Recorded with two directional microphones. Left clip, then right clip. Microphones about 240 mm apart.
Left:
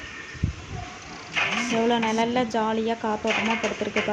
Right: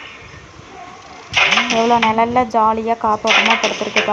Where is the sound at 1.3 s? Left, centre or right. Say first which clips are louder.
Right 11 dB; right.